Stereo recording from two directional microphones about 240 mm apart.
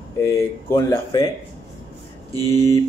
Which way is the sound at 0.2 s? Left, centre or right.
Centre.